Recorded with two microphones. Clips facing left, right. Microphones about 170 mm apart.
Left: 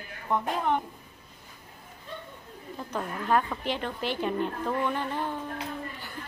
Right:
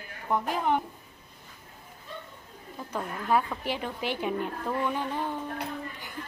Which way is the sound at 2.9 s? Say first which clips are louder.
Even; 5° right (ahead or behind).